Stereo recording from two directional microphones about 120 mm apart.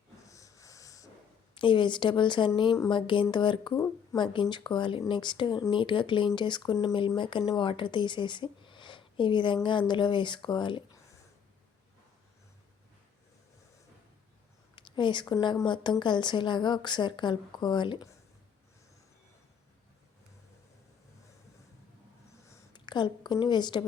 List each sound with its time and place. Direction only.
0.3 s a sound: 25° left (ahead or behind)
1.5 s a woman's voice: 40° left (ahead or behind)
2.9 s a sound: 45° left (ahead or behind)
3.3 s a woman's voice: 40° left (ahead or behind)
14.8 s a woman's voice: 40° left (ahead or behind)
22.7 s a woman's voice: 40° left (ahead or behind)